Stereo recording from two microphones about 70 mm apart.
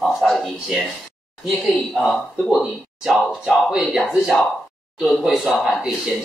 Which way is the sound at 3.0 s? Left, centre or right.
Centre.